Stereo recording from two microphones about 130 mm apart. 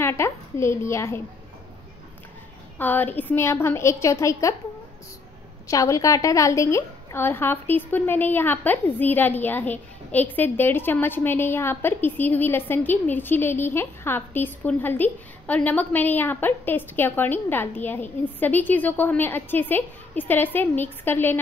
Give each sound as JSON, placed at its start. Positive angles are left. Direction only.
{"t": 0.0, "sound": "a woman's voice", "side_deg": 20}
{"t": 2.8, "sound": "a woman's voice", "side_deg": 15}
{"t": 5.7, "sound": "a woman's voice", "side_deg": 25}